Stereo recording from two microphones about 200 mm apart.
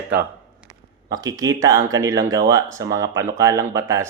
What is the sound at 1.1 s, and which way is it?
Speech, 20° right (ahead or behind).